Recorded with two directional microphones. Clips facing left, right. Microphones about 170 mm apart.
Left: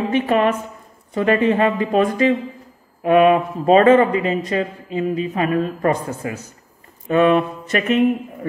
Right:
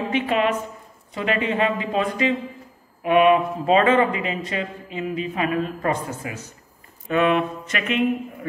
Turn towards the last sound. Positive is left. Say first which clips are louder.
# left 7 dB
turn(degrees=40)  # may be behind; listen again after turning